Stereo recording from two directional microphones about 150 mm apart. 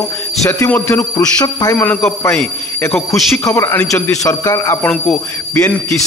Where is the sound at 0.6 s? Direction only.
15° left (ahead or behind).